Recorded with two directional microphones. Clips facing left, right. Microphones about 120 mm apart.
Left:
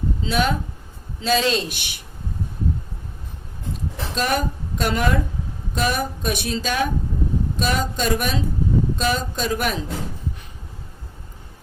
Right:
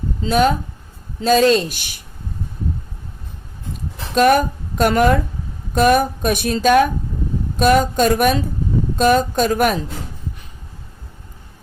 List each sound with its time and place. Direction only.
0.2 s speech: 45° right (ahead or behind)
4.1 s speech: 55° right (ahead or behind)